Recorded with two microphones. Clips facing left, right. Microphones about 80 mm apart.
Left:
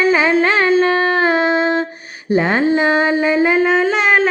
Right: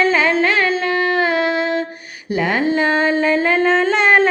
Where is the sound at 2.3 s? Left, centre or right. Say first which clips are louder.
Left 3 dB; left.